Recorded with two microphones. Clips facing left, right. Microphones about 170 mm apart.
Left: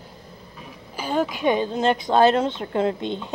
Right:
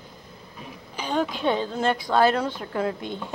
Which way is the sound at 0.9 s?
5° left (ahead or behind).